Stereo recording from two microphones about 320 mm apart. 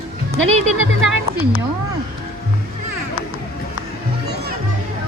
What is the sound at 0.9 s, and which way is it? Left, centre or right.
Speech, right.